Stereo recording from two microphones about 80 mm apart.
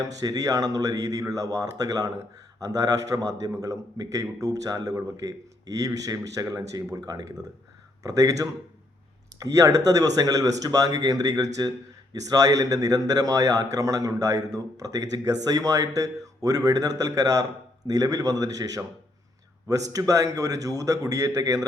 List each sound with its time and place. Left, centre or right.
0.0 s a man's voice: right